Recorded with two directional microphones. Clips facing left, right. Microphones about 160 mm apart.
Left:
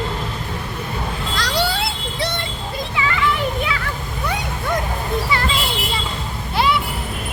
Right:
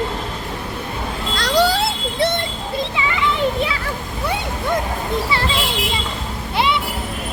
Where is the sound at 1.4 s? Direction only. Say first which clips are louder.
Right 6 dB; 45° right (ahead or behind).